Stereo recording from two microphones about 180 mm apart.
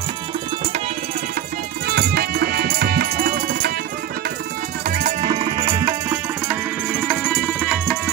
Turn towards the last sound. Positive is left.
turn(degrees=-5)  # may be behind; listen again after turning